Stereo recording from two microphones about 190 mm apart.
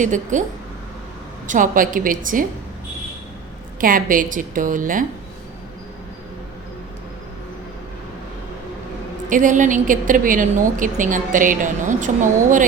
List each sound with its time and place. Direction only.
0.0 s a woman's voice: 40° right (ahead or behind)
1.5 s a woman's voice: 45° right (ahead or behind)
3.8 s a woman's voice: 45° right (ahead or behind)
9.3 s a woman's voice: 45° right (ahead or behind)